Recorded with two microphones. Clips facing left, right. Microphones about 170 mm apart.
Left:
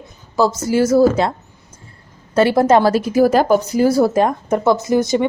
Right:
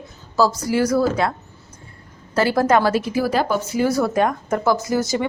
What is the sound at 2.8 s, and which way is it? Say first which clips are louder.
A woman's voice: left 6 dB; 40° left (ahead or behind).